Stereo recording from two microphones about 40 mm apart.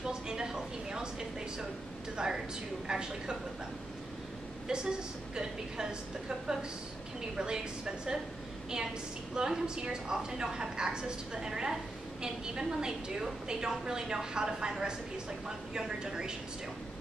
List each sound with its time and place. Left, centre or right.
0.0 s a sound: centre
2.1 s a woman's voice: centre
4.6 s a woman's voice: centre
9.3 s a woman's voice: centre